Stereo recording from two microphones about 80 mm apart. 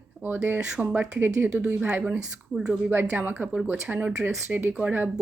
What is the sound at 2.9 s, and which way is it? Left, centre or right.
Speech, right.